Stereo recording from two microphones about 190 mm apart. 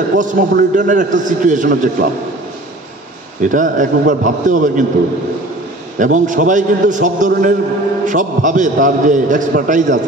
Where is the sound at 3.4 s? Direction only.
40° right (ahead or behind).